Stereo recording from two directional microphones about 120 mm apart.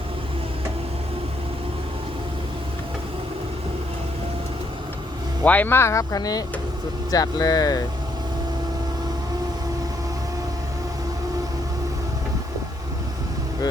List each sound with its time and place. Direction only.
5.4 s speech: 15° left (ahead or behind)